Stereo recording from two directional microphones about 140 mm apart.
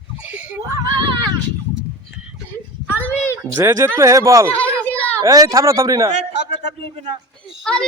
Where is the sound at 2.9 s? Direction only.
15° left (ahead or behind).